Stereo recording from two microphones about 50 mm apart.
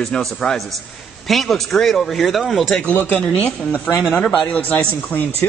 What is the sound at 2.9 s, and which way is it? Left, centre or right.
Speech, left.